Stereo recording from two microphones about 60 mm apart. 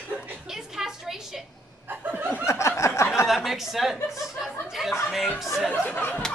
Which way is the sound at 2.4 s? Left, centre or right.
Left.